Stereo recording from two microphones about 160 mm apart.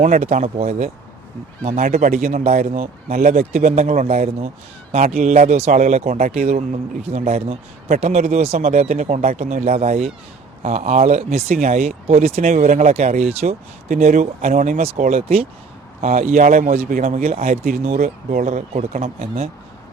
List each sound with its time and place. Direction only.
0.0 s speech: 45° right (ahead or behind)
5.0 s speech: 50° right (ahead or behind)